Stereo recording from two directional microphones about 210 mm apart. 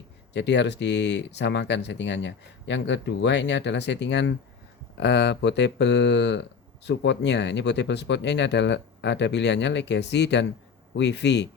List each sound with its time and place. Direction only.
0.3 s speech: 55° left (ahead or behind)